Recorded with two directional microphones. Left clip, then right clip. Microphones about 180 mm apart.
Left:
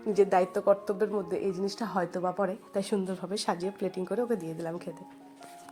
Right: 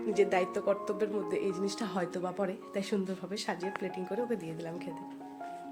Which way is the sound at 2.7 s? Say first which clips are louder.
Left 3 dB; 15° left (ahead or behind).